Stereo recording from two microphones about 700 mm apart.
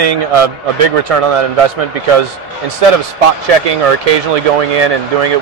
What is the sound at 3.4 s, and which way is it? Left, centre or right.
Speech, right.